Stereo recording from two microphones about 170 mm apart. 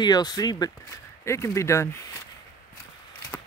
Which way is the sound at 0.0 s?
25° left (ahead or behind).